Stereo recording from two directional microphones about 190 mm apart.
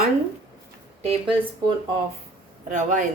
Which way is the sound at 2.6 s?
40° right (ahead or behind).